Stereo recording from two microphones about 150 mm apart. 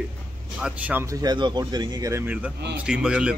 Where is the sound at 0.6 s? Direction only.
5° right (ahead or behind).